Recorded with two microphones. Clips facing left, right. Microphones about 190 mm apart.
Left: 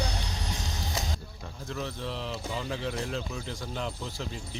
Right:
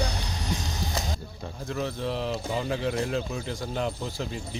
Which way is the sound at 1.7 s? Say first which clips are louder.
Right 5 dB; 50° right (ahead or behind).